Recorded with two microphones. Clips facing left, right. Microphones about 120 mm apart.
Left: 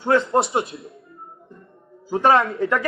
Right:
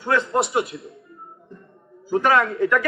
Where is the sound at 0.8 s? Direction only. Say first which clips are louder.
Even; centre (ahead or behind).